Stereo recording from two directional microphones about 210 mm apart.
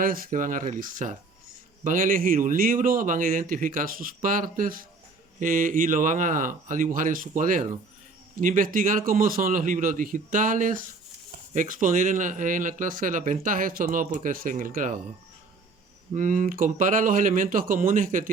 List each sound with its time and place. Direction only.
0.0 s speech: 45° right (ahead or behind)
16.1 s speech: 35° right (ahead or behind)